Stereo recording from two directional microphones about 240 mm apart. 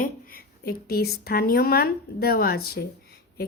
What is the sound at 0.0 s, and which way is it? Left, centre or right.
Speech, left.